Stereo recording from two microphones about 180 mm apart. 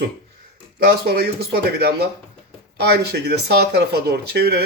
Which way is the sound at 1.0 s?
60° right (ahead or behind).